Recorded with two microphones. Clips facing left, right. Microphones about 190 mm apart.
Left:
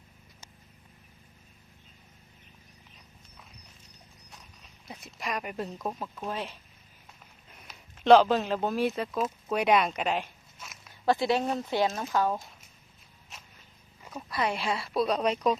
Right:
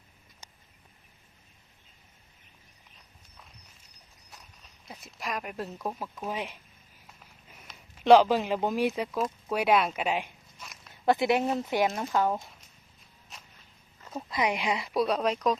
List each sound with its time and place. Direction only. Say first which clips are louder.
4.9 s speech: left 1 dB; centre (ahead or behind)
7.9 s speech: even; 10° right (ahead or behind)
10.6 s zipper: even; centre (ahead or behind)
11.0 s speech: right 1 dB; 20° right (ahead or behind)
11.4 s speech: right 2 dB; 5° right (ahead or behind)
11.7 s speech: left 1 dB; 15° right (ahead or behind)
14.3 s speech: right 1 dB; 15° right (ahead or behind); by 15.5 s centre (ahead or behind)